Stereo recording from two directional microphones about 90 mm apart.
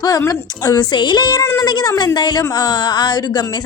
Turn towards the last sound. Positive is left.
turn(degrees=50)  # may be behind; listen again after turning